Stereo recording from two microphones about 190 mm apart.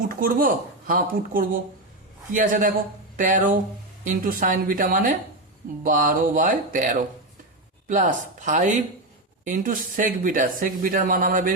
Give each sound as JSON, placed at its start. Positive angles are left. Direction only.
{"t": 0.1, "sound": "speech", "side_deg": -50}